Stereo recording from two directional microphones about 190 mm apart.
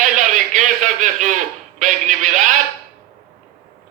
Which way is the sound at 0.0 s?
40° right (ahead or behind).